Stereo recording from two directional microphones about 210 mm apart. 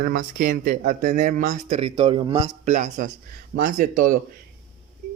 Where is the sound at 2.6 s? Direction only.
35° right (ahead or behind).